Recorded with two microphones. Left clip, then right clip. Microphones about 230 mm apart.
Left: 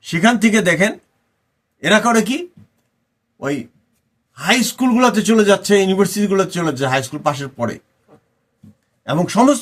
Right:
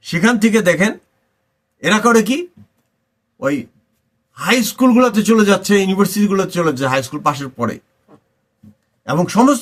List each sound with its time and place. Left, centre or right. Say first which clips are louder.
0.1 s a man's voice: even; centre
3.4 s a man's voice: right 4 dB; centre
9.0 s a man's voice: right 1 dB; centre